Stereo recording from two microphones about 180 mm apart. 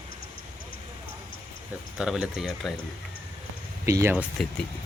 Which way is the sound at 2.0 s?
5° right (ahead or behind).